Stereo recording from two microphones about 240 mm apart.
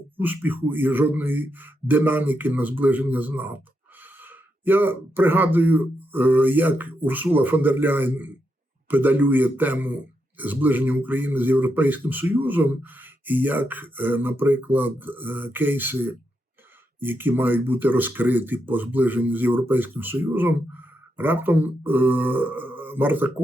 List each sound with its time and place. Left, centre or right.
0.2 s speech: centre